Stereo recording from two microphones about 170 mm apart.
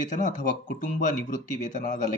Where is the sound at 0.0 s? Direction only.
45° left (ahead or behind).